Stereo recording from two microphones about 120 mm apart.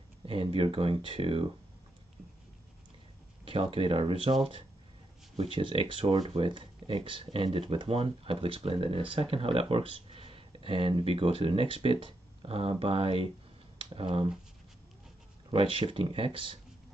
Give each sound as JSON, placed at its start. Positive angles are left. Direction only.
{"t": 0.2, "sound": "speech", "side_deg": -50}
{"t": 3.4, "sound": "speech", "side_deg": -50}
{"t": 15.5, "sound": "speech", "side_deg": -45}